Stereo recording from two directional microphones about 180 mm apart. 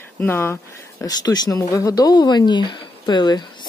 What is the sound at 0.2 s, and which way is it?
Speech, 10° left (ahead or behind).